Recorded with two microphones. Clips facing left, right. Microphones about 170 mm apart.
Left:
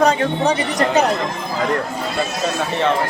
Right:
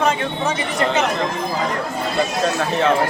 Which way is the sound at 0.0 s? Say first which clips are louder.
Left 4 dB; 40° left (ahead or behind).